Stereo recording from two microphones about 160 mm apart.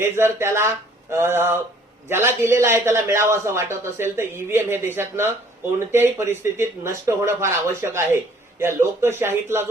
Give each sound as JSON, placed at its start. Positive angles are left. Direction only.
{"t": 0.0, "sound": "a man's voice", "side_deg": -15}